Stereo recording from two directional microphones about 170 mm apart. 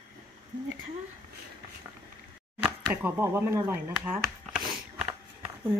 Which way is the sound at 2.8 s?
15° right (ahead or behind).